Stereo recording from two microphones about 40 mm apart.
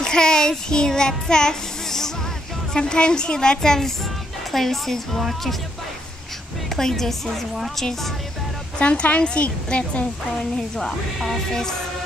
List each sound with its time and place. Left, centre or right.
0.0 s a child's voice: centre
6.8 s speech: centre
8.7 s a woman's voice: left
10.8 s speech: centre